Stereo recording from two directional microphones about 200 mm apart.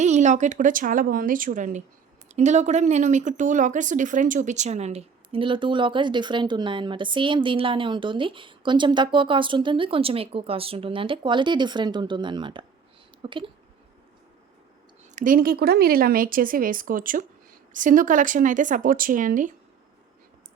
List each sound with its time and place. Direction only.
0.0 s speech: 35° right (ahead or behind)
15.1 s speech: 40° right (ahead or behind)